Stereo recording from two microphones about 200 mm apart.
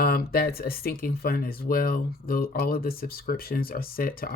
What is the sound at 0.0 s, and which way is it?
Speech, 50° left (ahead or behind).